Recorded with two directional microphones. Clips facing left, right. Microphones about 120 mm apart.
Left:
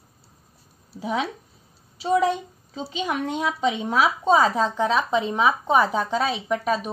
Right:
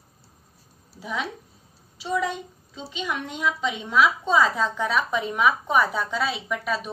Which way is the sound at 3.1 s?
40° left (ahead or behind).